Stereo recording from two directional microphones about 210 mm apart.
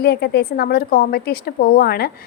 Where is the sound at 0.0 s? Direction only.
50° left (ahead or behind).